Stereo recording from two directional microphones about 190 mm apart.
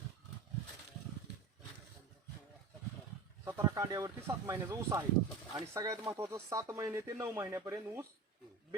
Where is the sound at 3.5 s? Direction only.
15° right (ahead or behind).